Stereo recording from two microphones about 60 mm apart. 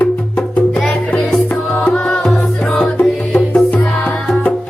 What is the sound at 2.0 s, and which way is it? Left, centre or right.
Music, centre.